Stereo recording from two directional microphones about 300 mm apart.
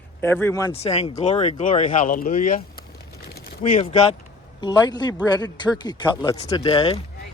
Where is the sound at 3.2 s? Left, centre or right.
Left.